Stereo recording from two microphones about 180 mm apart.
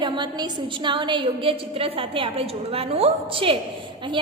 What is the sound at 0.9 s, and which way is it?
A woman's voice, 25° right (ahead or behind).